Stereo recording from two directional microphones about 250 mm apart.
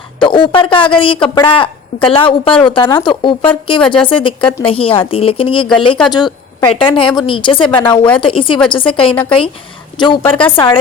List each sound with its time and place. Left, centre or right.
0.2 s a woman's voice: centre
3.8 s speech: centre
4.0 s a woman's voice: centre
7.9 s speech: centre
8.2 s a woman's voice: left